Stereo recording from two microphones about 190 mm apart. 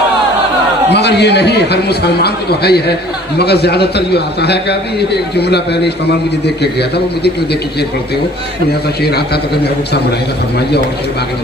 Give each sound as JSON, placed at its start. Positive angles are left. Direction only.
{"t": 0.9, "sound": "a man's voice", "side_deg": 65}
{"t": 9.0, "sound": "a man's voice", "side_deg": 55}